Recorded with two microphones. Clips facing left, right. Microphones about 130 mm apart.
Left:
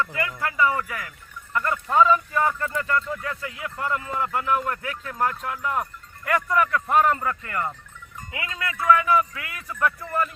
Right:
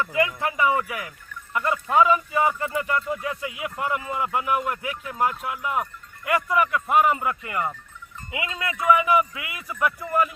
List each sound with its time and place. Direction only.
0.0 s speech: 15° right (ahead or behind)